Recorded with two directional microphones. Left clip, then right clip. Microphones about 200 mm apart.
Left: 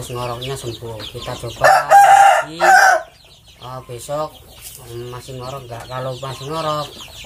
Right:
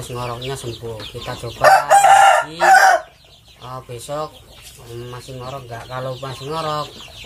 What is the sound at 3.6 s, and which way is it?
Chicken, 10° right (ahead or behind).